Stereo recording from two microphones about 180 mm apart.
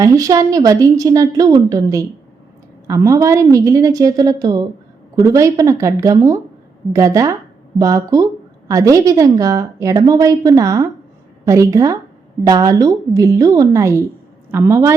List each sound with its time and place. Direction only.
0.0 s a woman's voice: 20° right (ahead or behind)